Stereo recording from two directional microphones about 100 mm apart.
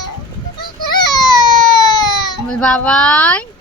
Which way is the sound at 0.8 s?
45° left (ahead or behind).